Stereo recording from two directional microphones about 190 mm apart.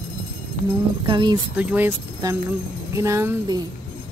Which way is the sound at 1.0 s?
20° right (ahead or behind).